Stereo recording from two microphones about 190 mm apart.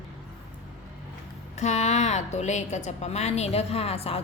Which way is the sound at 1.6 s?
35° left (ahead or behind).